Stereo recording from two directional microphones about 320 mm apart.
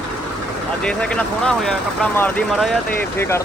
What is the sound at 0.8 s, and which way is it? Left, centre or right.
Speech, centre.